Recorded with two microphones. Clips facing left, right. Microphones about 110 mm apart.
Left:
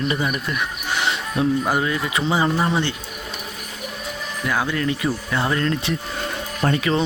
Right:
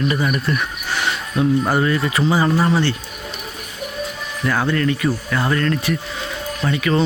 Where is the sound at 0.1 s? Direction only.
15° left (ahead or behind).